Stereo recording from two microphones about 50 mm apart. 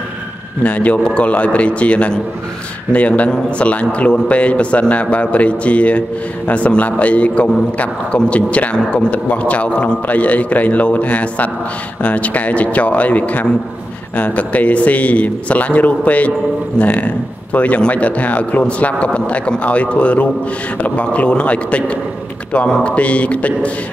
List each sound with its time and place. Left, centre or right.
0.7 s a man's voice: left